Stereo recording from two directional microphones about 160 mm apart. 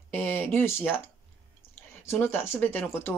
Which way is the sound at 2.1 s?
15° left (ahead or behind).